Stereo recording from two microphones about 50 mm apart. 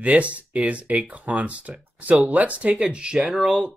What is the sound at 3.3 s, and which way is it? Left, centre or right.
Speech, centre.